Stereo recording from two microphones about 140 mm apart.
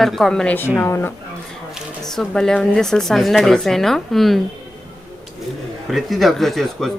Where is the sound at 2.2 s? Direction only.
5° left (ahead or behind).